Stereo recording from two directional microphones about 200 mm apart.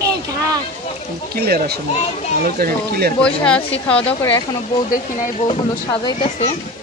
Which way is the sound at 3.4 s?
5° left (ahead or behind).